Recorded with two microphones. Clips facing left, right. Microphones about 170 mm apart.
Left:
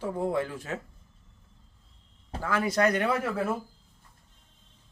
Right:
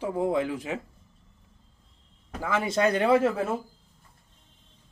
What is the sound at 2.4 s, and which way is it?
Speech, 20° right (ahead or behind).